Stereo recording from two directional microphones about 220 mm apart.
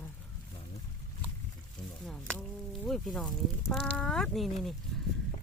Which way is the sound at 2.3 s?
5° left (ahead or behind).